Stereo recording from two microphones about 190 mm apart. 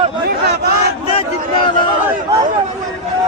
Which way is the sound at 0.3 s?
55° right (ahead or behind).